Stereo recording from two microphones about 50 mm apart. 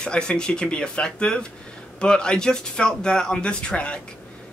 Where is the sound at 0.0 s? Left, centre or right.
Centre.